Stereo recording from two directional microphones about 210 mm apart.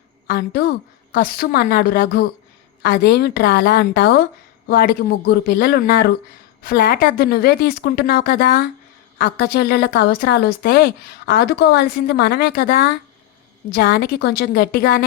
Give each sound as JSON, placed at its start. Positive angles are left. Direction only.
{"t": 0.3, "sound": "a woman's voice", "side_deg": 50}